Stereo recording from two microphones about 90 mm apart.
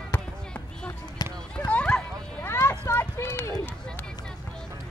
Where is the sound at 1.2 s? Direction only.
50° left (ahead or behind).